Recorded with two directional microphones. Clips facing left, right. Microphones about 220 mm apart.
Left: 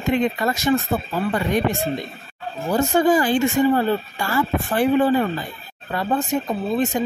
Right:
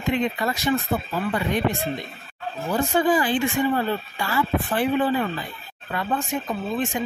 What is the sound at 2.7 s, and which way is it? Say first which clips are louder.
Speech: left 4 dB; 45° left (ahead or behind).